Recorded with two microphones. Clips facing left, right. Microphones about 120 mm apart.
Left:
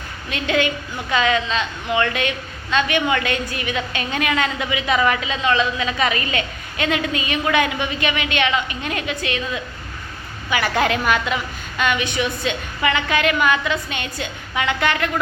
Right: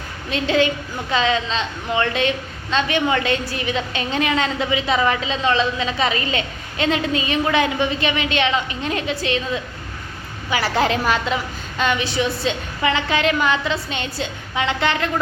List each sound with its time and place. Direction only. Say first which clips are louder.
0.3 s a woman's voice: right 2 dB; 30° right (ahead or behind)
10.5 s a woman's voice: even; 30° right (ahead or behind)